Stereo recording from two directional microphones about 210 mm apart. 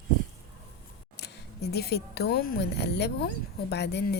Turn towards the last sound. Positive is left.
turn(degrees=50)  # may be behind; listen again after turning